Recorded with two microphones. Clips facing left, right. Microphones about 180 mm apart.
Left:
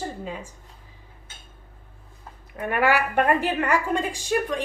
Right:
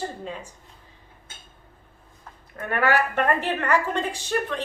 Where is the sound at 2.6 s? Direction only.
10° left (ahead or behind).